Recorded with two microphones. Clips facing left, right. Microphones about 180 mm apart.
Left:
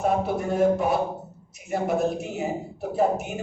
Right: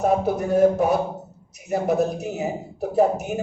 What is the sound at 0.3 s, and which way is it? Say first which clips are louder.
A man's voice: right 4 dB; 40° right (ahead or behind).